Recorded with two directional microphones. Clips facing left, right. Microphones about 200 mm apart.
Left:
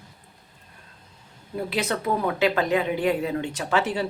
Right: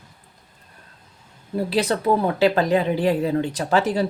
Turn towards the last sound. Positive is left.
turn(degrees=-35)  # may be behind; listen again after turning